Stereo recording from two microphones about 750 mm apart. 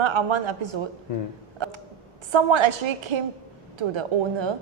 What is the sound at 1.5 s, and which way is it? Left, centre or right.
Tick, right.